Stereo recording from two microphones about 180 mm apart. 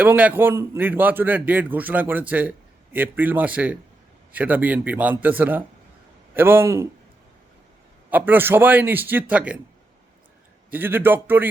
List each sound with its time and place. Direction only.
0.0 s a man's voice: 10° right (ahead or behind)
8.1 s a man's voice: 10° right (ahead or behind)
10.7 s a man's voice: 10° right (ahead or behind)